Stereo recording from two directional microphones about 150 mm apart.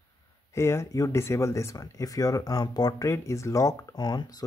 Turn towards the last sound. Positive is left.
turn(degrees=30)  # may be behind; listen again after turning